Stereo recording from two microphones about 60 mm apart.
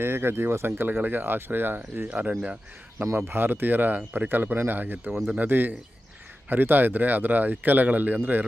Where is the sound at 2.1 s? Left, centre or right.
Right.